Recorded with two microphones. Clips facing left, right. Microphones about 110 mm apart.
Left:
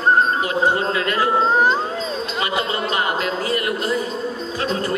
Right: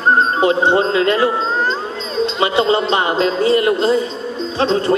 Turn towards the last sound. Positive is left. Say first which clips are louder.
# right 7 dB
turn(degrees=-25)  # may be behind; listen again after turning